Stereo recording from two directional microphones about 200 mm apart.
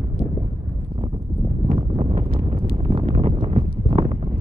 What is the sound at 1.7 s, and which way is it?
Wind noise, 25° right (ahead or behind).